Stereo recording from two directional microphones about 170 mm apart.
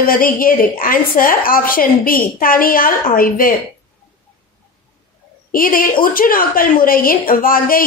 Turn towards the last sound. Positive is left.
turn(degrees=55)  # may be behind; listen again after turning